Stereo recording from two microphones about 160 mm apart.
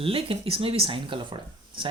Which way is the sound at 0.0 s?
35° right (ahead or behind).